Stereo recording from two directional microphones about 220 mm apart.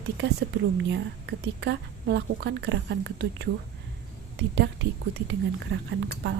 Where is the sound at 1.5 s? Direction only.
50° right (ahead or behind).